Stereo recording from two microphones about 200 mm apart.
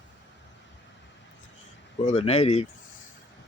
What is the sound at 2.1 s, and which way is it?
Speech, 30° left (ahead or behind).